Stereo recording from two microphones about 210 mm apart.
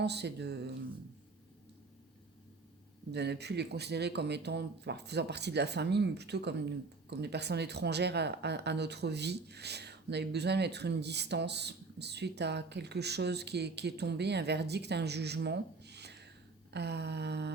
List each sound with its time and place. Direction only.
0.0 s speech: 55° right (ahead or behind)
3.1 s speech: 55° right (ahead or behind)